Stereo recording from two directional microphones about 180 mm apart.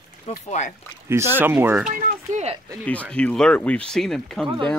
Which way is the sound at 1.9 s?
45° right (ahead or behind).